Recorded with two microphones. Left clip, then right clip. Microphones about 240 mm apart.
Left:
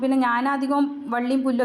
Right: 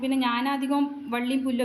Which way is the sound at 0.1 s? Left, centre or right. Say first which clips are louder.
Left 2 dB; centre.